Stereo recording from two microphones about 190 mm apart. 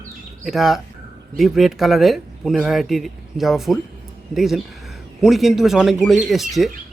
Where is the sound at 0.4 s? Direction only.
Centre (ahead or behind).